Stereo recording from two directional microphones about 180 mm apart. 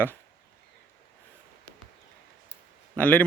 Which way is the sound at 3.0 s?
10° left (ahead or behind).